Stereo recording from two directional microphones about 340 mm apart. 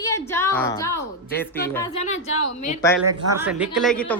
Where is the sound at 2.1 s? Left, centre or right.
Left.